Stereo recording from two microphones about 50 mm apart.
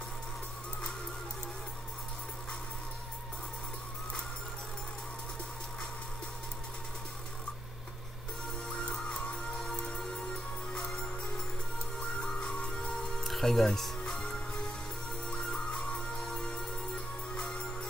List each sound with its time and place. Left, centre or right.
8.6 s music: centre
12.0 s music: centre